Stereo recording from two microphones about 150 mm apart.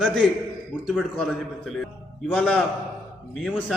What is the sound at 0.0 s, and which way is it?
A man's voice, 5° left (ahead or behind).